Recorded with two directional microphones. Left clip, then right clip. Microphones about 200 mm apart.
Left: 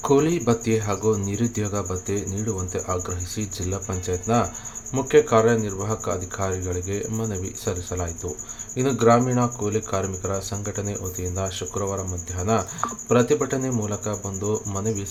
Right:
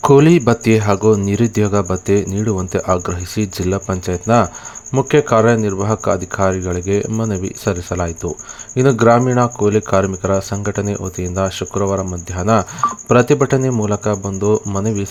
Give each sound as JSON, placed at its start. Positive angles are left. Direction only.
{"t": 0.0, "sound": "speech", "side_deg": -45}